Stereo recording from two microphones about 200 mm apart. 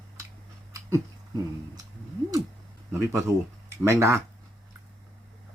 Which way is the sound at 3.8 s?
15° right (ahead or behind).